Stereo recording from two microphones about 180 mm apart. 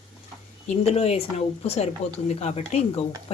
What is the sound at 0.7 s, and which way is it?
Speech, 35° left (ahead or behind).